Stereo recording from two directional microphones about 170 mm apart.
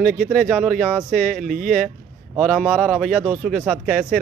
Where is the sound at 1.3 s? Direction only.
50° right (ahead or behind).